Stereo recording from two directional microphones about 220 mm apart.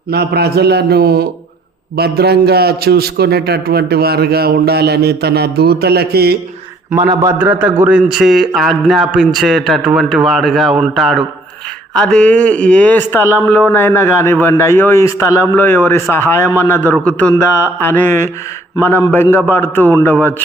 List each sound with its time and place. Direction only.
0.1 s a man's voice: 45° right (ahead or behind)
6.9 s a man's voice: 15° right (ahead or behind); by 20.3 s 10° left (ahead or behind)